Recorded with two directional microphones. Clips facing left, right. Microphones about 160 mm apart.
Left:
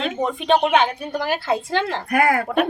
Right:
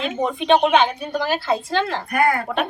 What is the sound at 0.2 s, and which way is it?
A woman's voice, centre (ahead or behind).